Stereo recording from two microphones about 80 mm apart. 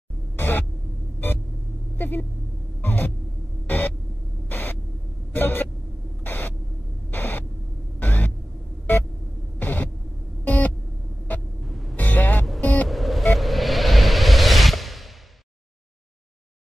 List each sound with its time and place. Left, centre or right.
0.4 s a sound: left
2.0 s speech: left
2.8 s a sound: left
3.6 s hum: left
4.5 s a sound: left
5.3 s vehicle: left
6.2 s a sound: left
9.6 s hum: left
10.4 s music: left
11.3 s vehicle: centre
12.0 s music: left
12.8 s music: centre